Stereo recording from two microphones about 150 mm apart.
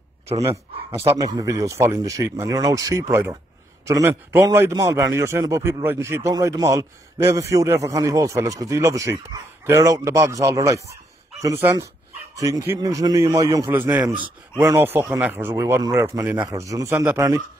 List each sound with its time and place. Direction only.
1.0 s a man's voice: 25° right (ahead or behind)
14.0 s speech: 30° right (ahead or behind)
14.6 s speech: 15° right (ahead or behind)